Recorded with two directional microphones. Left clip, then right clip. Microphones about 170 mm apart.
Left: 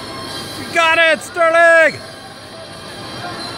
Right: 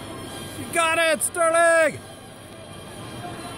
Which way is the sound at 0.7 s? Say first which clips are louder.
Left 8 dB; 10° right (ahead or behind).